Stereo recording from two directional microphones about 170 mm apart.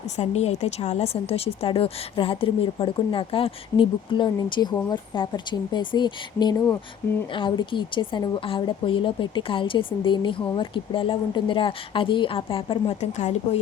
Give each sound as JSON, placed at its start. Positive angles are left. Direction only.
{"t": 0.2, "sound": "a woman's voice", "side_deg": 40}